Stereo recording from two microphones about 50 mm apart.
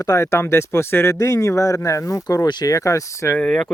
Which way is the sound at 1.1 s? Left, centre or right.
Left.